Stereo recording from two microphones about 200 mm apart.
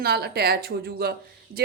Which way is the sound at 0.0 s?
50° right (ahead or behind).